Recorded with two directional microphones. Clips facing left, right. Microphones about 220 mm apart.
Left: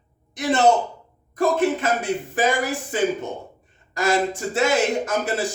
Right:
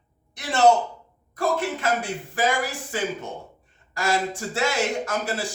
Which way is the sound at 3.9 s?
20° left (ahead or behind).